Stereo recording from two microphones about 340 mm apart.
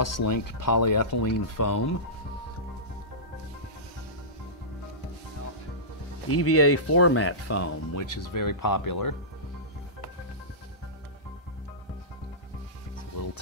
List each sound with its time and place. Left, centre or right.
0.0 s speech: left
6.3 s speech: left